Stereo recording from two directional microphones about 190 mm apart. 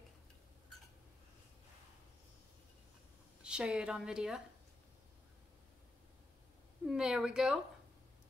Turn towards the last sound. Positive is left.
turn(degrees=-5)  # may be behind; listen again after turning